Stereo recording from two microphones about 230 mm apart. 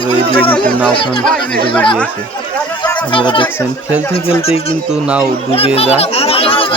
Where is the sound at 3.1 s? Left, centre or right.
Left.